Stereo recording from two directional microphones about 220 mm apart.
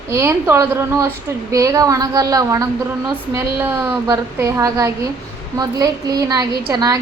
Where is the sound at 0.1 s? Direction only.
10° right (ahead or behind).